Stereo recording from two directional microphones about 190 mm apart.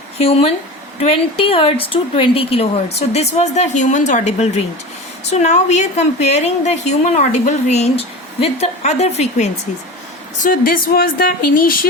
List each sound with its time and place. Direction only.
0.2 s a woman's voice: 30° left (ahead or behind)
10.4 s speech: 50° left (ahead or behind)